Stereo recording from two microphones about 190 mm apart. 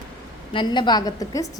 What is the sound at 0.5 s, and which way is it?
Speech, 25° left (ahead or behind).